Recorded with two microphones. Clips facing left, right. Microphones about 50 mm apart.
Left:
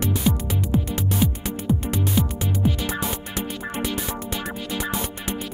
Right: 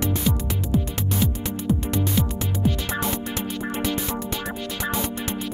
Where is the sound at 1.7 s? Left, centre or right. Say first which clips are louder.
Even; centre.